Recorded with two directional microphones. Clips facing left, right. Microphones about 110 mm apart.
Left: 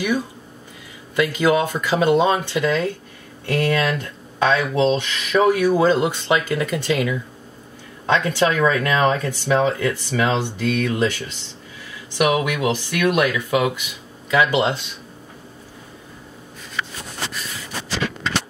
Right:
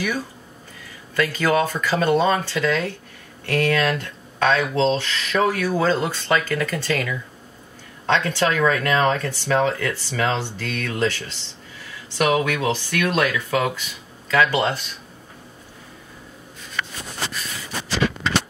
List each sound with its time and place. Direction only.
1.1 s speech: 15° left (ahead or behind)